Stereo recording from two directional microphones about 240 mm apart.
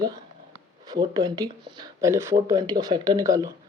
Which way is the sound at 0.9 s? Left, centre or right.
Centre.